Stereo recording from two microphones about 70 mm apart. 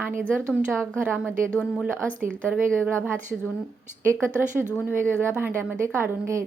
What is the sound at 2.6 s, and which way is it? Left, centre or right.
Speech, right.